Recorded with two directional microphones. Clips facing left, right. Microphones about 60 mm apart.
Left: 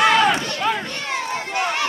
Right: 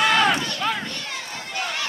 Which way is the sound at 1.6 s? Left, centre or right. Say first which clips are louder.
Left 5 dB; left.